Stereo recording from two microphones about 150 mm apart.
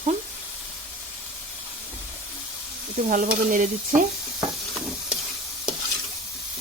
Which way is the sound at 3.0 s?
60° right (ahead or behind).